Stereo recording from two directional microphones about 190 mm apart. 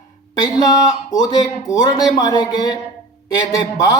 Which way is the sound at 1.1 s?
20° left (ahead or behind).